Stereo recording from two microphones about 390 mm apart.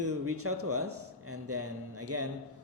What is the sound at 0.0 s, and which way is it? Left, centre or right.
Speech, right.